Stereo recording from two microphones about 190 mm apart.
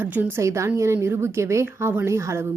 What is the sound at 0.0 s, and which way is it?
A woman's voice, 10° right (ahead or behind).